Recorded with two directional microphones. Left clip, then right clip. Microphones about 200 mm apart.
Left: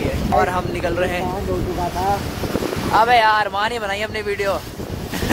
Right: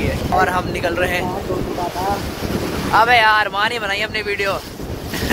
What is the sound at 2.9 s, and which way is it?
Speech, 15° left (ahead or behind).